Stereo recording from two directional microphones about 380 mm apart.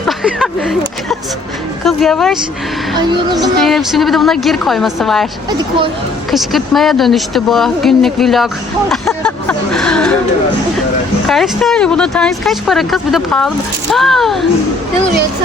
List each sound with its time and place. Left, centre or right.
0.2 s a sound: centre
1.8 s speech: centre
3.1 s speech: centre
3.6 s speech: centre
5.5 s speech: centre
6.3 s speech: centre
8.9 s a sound: centre
11.3 s speech: centre